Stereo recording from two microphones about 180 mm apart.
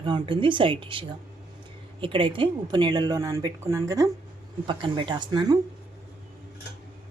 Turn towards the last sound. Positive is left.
turn(degrees=-20)  # may be behind; listen again after turning